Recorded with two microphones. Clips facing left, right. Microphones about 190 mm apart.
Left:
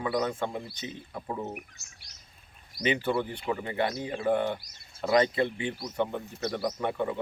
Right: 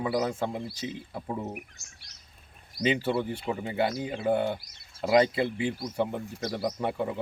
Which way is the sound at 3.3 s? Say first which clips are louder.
Right 1 dB; 5° right (ahead or behind).